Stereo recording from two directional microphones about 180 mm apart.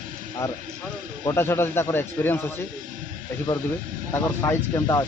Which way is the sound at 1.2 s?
15° left (ahead or behind).